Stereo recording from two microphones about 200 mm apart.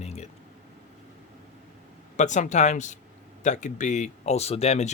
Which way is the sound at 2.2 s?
35° left (ahead or behind).